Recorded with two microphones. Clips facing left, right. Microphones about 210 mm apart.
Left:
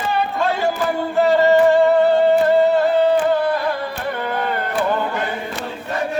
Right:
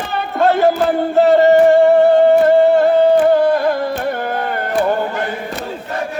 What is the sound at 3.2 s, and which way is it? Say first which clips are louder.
Carnatic music: right 6 dB; 45° right (ahead or behind).